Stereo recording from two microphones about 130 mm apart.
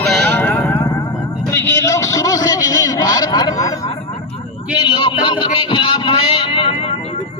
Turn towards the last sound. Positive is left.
turn(degrees=45)  # may be behind; listen again after turning